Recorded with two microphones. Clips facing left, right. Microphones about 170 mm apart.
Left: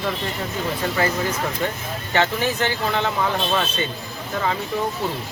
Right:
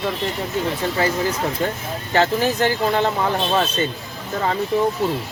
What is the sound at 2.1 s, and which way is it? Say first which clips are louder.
Speech: right 3 dB; 35° right (ahead or behind).